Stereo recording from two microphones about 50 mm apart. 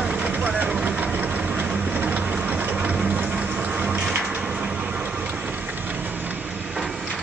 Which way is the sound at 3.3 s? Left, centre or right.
Centre.